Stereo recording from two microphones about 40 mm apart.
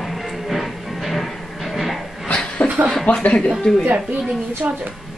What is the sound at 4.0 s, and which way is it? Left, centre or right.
Speech, centre.